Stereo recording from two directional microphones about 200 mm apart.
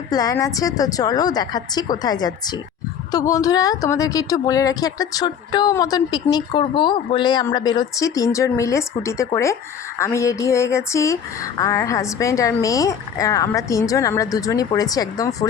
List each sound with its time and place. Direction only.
0.1 s a woman's voice: 20° left (ahead or behind)